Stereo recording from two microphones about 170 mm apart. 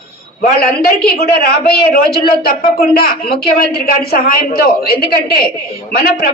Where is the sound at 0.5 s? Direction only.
65° left (ahead or behind).